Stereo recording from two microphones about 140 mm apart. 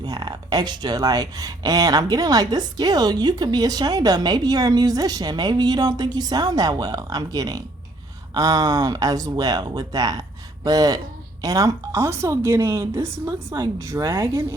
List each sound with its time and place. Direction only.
0.0 s speech: 30° right (ahead or behind)